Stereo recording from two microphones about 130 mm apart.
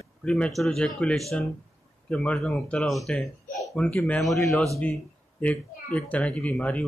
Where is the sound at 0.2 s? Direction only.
10° left (ahead or behind).